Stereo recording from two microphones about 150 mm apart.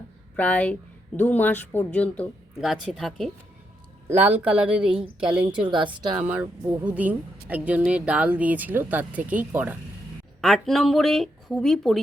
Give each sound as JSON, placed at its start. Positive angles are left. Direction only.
{"t": 0.3, "sound": "speech", "side_deg": 10}
{"t": 2.6, "sound": "speech", "side_deg": 0}
{"t": 4.2, "sound": "speech", "side_deg": -10}
{"t": 5.5, "sound": "a woman's voice", "side_deg": -35}
{"t": 6.1, "sound": "speech", "side_deg": -10}
{"t": 10.4, "sound": "speech", "side_deg": 0}